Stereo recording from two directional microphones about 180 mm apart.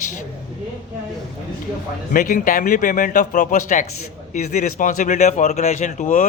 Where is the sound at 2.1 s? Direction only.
50° left (ahead or behind).